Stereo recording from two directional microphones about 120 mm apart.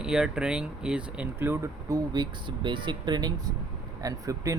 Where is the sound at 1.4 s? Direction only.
20° right (ahead or behind).